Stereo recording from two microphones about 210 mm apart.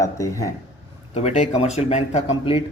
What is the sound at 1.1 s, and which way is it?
Speech, 30° left (ahead or behind).